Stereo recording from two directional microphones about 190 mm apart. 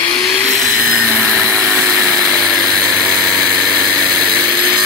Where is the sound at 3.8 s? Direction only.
Centre (ahead or behind).